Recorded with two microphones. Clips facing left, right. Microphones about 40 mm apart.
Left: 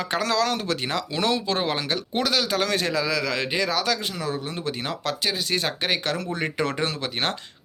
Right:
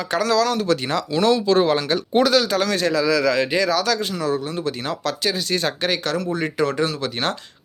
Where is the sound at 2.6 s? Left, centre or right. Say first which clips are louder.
Right 5 dB; centre.